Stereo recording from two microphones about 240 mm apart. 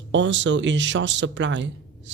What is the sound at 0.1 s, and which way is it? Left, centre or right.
Speech, right.